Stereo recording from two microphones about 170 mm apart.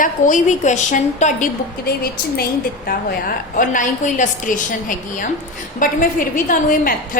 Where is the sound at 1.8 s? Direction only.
65° left (ahead or behind).